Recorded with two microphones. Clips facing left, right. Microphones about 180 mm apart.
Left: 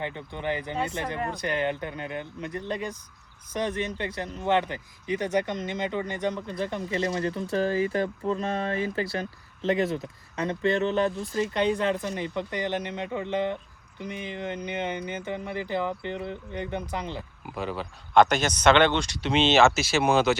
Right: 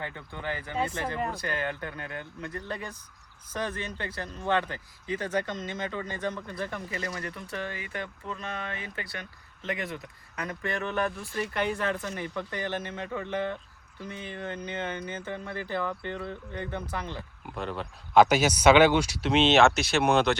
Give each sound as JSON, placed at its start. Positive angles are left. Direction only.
{"t": 0.0, "sound": "speech", "side_deg": 20}